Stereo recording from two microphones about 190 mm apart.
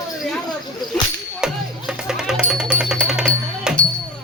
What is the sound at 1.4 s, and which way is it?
Music, 5° right (ahead or behind).